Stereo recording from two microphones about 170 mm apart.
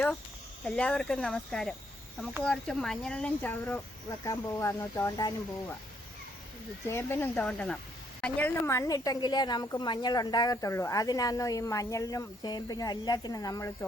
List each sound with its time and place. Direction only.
0.6 s speech: 5° left (ahead or behind)
6.8 s a woman's voice: 15° left (ahead or behind)